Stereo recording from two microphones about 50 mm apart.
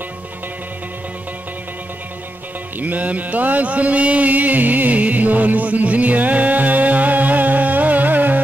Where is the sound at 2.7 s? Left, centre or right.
Right.